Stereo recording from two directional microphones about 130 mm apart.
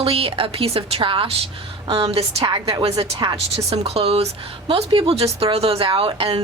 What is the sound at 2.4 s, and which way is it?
A woman's voice, 35° right (ahead or behind).